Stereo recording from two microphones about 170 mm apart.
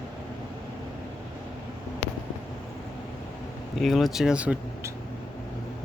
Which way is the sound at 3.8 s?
Centre (ahead or behind).